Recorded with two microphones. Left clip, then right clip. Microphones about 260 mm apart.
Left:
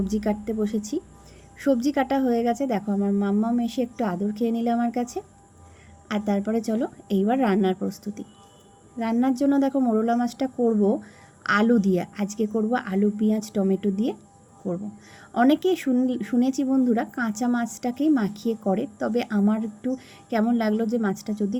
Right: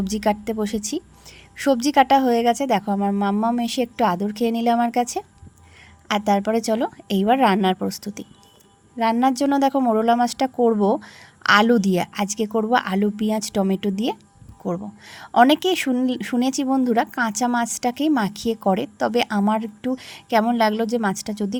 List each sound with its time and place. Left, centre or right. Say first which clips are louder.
0.0 s speech: right 5 dB; right